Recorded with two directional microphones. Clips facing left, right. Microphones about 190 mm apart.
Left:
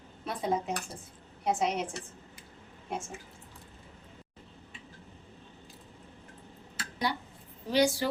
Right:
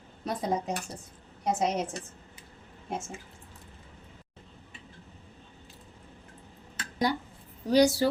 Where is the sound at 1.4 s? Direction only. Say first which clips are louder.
Right 2 dB; 40° right (ahead or behind).